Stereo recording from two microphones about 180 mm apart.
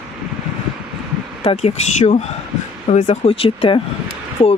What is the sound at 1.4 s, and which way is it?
Speech, 35° left (ahead or behind).